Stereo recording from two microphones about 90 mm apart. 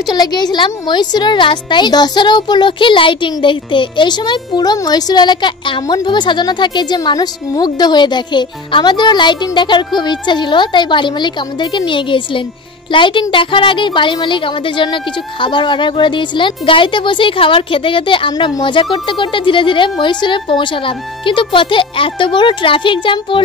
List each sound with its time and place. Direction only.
0.1 s a woman's voice: 50° left (ahead or behind); by 23.4 s 70° left (ahead or behind)